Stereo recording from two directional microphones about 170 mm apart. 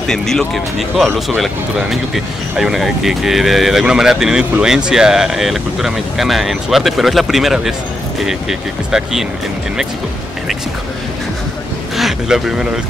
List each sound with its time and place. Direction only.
0.1 s speech: 5° left (ahead or behind)
12.0 s speech: 5° right (ahead or behind)